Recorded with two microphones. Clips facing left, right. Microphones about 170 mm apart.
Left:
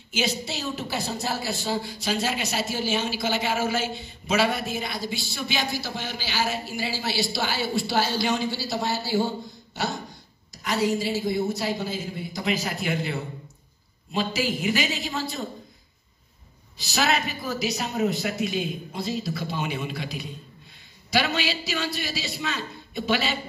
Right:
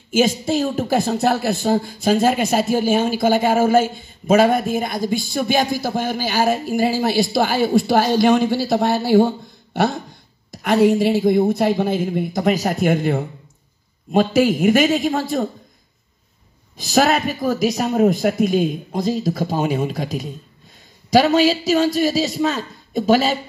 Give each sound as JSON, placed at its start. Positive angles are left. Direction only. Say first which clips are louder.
{"t": 0.1, "sound": "a woman's voice", "louder": "right 11 dB", "side_deg": -50}
{"t": 10.5, "sound": "a woman's voice", "louder": "right 10 dB", "side_deg": -55}
{"t": 16.7, "sound": "a woman's voice", "louder": "right 8 dB", "side_deg": -45}